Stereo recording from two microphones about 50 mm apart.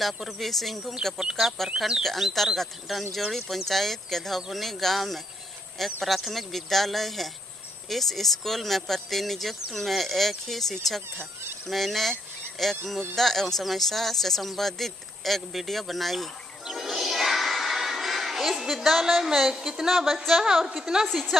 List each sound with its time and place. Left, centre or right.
0.0 s speech: centre
11.1 s speech: right
11.6 s speech: centre
16.6 s music: centre
20.2 s a woman's voice: centre
21.1 s speech: centre